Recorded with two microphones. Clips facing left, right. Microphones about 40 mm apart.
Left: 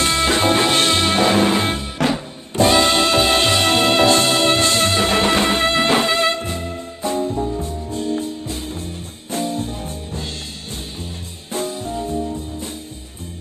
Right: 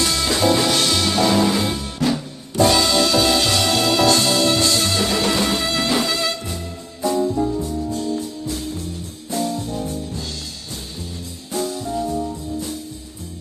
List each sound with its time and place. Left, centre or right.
0.0 s music: left